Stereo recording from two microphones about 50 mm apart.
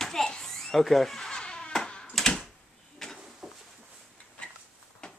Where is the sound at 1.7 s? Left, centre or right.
Centre.